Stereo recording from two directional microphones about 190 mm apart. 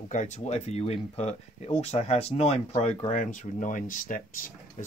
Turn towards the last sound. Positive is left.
turn(degrees=45)  # may be behind; listen again after turning